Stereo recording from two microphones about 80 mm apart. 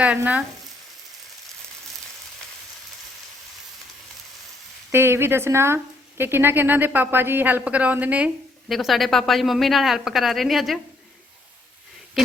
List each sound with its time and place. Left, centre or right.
4.9 s speech: right
8.7 s a woman's voice: centre